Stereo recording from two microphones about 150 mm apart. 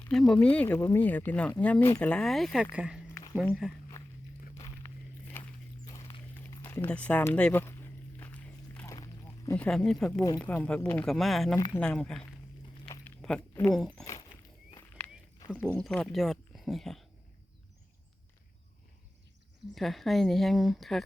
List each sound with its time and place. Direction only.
0.1 s speech: 5° left (ahead or behind)
4.5 s walk: 20° left (ahead or behind)
5.4 s horse: 10° left (ahead or behind)
5.8 s a sound: 25° left (ahead or behind)
8.9 s walk: 20° left (ahead or behind)
9.6 s speech: 5° left (ahead or behind)
11.0 s speech: centre (ahead or behind)
13.1 s a sound: 5° left (ahead or behind)
13.7 s speech: centre (ahead or behind)
14.0 s dog: 25° left (ahead or behind)
15.6 s speech: 5° left (ahead or behind)
19.7 s speech: centre (ahead or behind)